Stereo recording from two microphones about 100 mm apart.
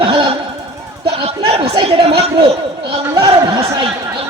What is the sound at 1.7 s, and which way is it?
Speech, 60° right (ahead or behind).